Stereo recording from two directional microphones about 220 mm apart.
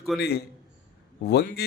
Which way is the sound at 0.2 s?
50° left (ahead or behind).